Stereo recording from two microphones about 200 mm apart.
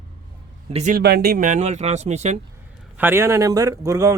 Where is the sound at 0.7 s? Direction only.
35° right (ahead or behind).